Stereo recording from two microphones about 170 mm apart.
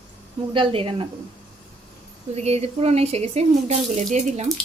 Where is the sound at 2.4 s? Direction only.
40° right (ahead or behind).